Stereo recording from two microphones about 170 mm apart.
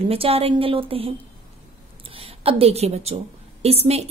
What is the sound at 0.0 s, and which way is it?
A woman's voice, 35° right (ahead or behind).